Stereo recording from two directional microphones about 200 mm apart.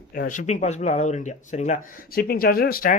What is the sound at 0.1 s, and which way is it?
Speech, 45° left (ahead or behind).